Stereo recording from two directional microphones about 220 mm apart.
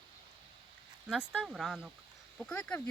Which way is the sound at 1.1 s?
5° right (ahead or behind).